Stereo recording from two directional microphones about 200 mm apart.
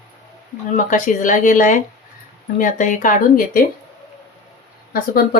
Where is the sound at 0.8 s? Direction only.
40° left (ahead or behind).